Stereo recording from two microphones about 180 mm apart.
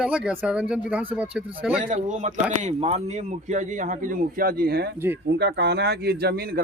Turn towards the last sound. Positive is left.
turn(degrees=-60)  # may be behind; listen again after turning